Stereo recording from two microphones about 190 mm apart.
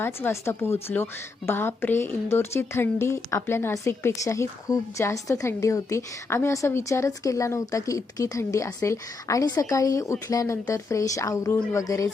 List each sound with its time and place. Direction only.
0.0 s speech: 10° left (ahead or behind)